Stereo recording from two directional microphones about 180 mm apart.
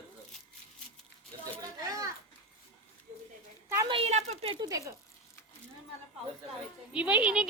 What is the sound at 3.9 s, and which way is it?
Speech, 35° right (ahead or behind).